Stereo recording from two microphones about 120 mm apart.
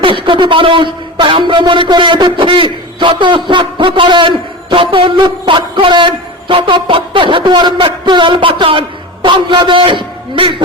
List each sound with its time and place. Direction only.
0.0 s speech: 45° right (ahead or behind)